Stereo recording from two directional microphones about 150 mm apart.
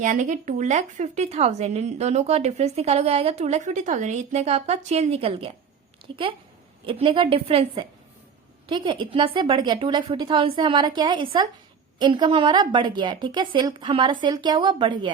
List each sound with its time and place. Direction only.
0.0 s a woman's voice: 55° right (ahead or behind); by 15.1 s 30° right (ahead or behind)